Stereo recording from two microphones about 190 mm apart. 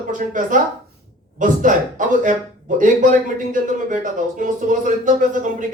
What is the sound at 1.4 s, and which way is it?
Speech, 40° right (ahead or behind).